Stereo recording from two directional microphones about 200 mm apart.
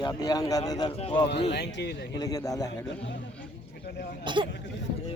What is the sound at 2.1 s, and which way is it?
Speech, 20° left (ahead or behind).